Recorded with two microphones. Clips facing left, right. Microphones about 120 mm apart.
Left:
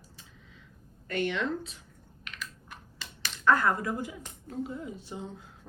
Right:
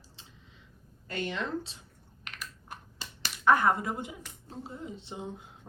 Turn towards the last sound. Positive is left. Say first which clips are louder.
# even
turn(degrees=-20)  # may be behind; listen again after turning